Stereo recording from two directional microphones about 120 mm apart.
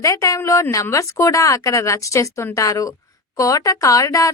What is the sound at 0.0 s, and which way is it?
Speech, 25° left (ahead or behind).